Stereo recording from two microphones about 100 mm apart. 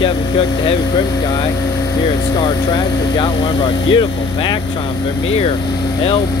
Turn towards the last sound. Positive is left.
turn(degrees=50)  # may be behind; listen again after turning